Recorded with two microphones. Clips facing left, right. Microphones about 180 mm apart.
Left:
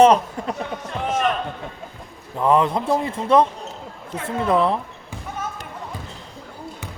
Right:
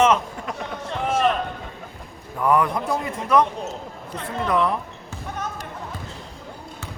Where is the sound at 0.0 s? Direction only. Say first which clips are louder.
Left 5 dB; 35° left (ahead or behind).